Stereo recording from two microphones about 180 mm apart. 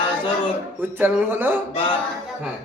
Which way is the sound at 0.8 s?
10° right (ahead or behind).